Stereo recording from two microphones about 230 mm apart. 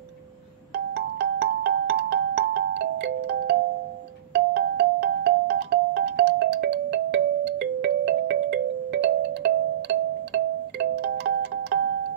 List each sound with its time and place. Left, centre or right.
0.7 s music: right